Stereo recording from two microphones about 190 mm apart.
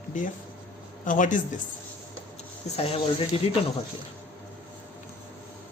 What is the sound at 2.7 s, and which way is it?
Speech, 30° left (ahead or behind).